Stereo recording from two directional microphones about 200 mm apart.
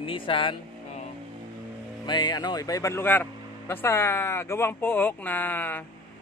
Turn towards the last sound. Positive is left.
turn(degrees=10)  # may be behind; listen again after turning